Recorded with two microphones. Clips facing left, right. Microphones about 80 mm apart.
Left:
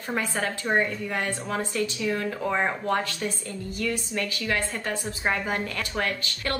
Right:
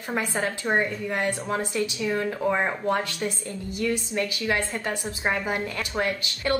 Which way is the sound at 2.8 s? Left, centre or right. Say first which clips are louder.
Right 1 dB; centre.